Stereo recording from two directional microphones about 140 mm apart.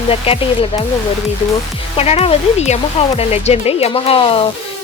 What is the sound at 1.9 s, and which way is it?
Speech, 45° left (ahead or behind).